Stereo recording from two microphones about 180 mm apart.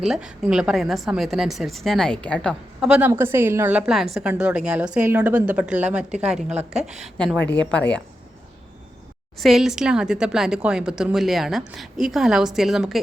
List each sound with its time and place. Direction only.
0.0 s a woman's voice: 5° right (ahead or behind)
6.5 s a woman's voice: 40° right (ahead or behind)
6.8 s a woman's voice: centre (ahead or behind)
9.4 s a woman's voice: centre (ahead or behind)